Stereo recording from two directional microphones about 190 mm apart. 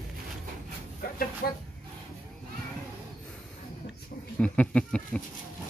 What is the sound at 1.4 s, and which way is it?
Speech, 55° left (ahead or behind).